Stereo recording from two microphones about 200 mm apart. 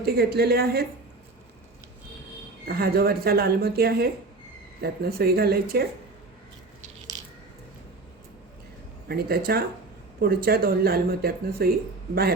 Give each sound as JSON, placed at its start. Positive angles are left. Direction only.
{"t": 0.0, "sound": "speech", "side_deg": -50}
{"t": 2.6, "sound": "speech", "side_deg": -50}
{"t": 9.0, "sound": "speech", "side_deg": -50}